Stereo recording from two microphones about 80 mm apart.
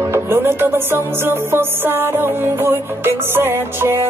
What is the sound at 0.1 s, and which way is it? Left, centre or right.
Music, right.